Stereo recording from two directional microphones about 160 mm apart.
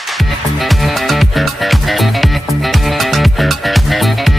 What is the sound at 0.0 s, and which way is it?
Music, centre (ahead or behind).